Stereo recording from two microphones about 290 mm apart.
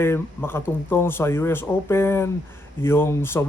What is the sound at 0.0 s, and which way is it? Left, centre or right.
Speech, centre.